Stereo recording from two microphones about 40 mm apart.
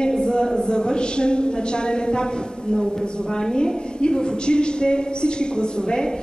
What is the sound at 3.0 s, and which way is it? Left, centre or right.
A woman's voice, left.